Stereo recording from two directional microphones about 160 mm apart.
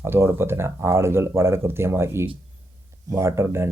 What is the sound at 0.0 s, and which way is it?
Speech, 15° right (ahead or behind).